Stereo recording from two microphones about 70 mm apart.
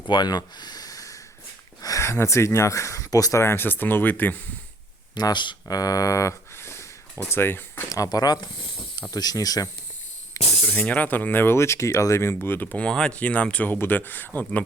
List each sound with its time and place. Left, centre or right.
0.1 s speech: left
2.0 s speech: left
3.4 s speech: left
5.1 s speech: left
7.9 s speech: left
10.4 s speech: left
10.8 s speech: left